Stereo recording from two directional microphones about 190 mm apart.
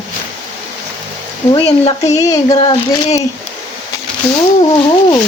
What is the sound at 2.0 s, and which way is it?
Speech, 20° left (ahead or behind).